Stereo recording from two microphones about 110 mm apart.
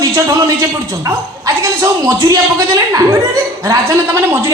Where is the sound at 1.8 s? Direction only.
30° right (ahead or behind).